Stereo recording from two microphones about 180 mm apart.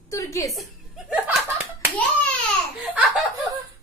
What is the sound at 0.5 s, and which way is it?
Chuckle, centre (ahead or behind).